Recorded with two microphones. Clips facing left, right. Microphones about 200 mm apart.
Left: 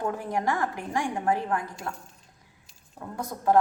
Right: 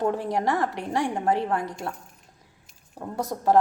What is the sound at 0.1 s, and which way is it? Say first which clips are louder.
Speech: right 3 dB; 25° right (ahead or behind).